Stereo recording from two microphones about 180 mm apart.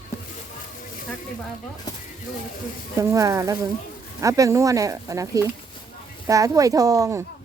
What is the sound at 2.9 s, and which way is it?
Speech, 20° right (ahead or behind).